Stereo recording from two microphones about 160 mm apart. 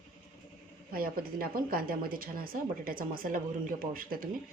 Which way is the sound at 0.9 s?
65° right (ahead or behind).